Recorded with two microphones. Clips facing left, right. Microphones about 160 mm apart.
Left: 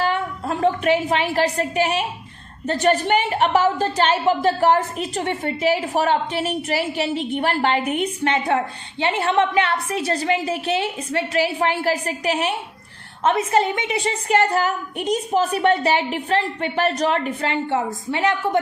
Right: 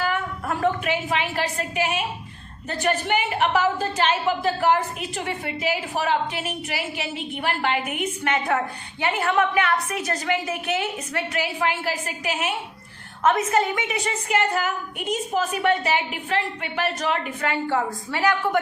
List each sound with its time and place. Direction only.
0.0 s a woman's voice: 30° left (ahead or behind)
13.2 s a woman's voice: 25° left (ahead or behind)
17.5 s a woman's voice: 25° left (ahead or behind)